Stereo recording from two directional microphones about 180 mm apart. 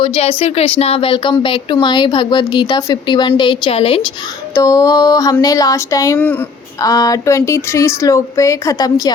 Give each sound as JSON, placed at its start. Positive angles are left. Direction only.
{"t": 0.0, "sound": "speech", "side_deg": 30}
{"t": 4.5, "sound": "speech", "side_deg": 20}